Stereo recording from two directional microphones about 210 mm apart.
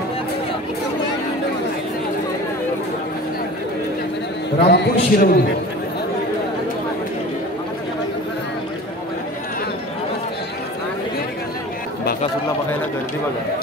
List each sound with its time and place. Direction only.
4.6 s a man's voice: 50° left (ahead or behind)